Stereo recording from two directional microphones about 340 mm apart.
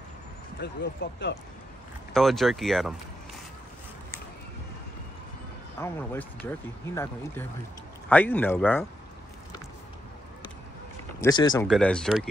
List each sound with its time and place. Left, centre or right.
0.6 s speech: left
2.1 s speech: centre
5.8 s speech: centre
11.1 s speech: centre